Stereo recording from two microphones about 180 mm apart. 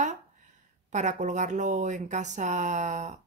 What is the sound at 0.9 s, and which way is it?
Speech, 40° right (ahead or behind).